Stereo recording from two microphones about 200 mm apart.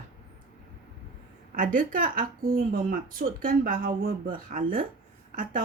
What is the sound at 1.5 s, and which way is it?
Speech, 40° right (ahead or behind).